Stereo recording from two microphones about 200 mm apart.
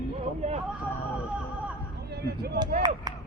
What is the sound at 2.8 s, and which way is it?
Speech, 20° right (ahead or behind).